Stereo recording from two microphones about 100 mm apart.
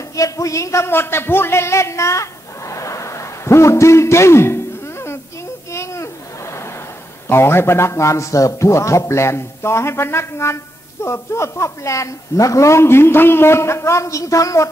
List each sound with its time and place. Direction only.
0.1 s a man's voice: 35° left (ahead or behind)
2.7 s hoot: 30° left (ahead or behind)
5.7 s a sound: 30° left (ahead or behind)
7.2 s a man's voice: 25° left (ahead or behind)